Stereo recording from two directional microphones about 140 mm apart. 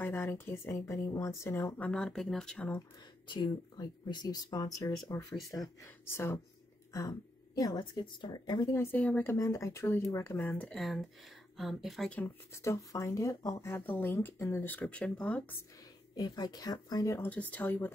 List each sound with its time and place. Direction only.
0.0 s speech: 15° left (ahead or behind)
1.8 s speech: 5° left (ahead or behind)
3.3 s speech: 30° left (ahead or behind)
8.7 s speech: 15° left (ahead or behind)
10.7 s speech: centre (ahead or behind)
12.6 s speech: 25° left (ahead or behind)
16.2 s speech: 30° left (ahead or behind)
17.3 s speech: 10° left (ahead or behind)